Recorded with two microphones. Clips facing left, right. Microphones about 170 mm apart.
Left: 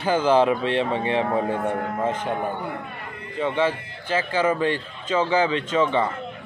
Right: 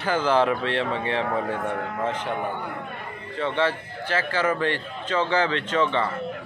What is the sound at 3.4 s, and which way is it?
Speech, 15° left (ahead or behind).